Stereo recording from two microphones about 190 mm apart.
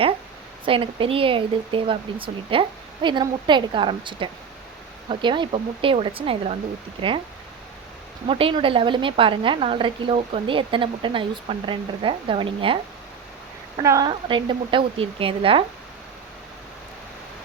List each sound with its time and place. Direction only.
0.6 s a woman's voice: 30° right (ahead or behind)
8.3 s a woman's voice: 30° right (ahead or behind)
13.8 s a woman's voice: 15° right (ahead or behind)